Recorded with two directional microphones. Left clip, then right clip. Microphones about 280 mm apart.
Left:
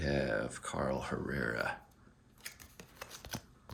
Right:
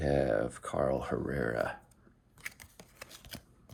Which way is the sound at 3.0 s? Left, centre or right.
Centre.